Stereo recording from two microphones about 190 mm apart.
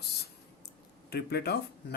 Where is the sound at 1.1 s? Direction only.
60° left (ahead or behind).